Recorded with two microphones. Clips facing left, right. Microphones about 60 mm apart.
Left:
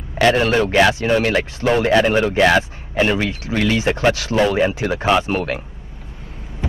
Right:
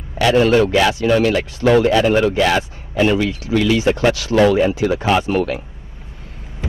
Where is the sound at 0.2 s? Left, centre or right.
Left.